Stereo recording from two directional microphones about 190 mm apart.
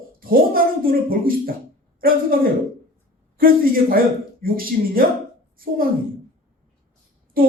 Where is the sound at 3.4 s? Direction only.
50° right (ahead or behind).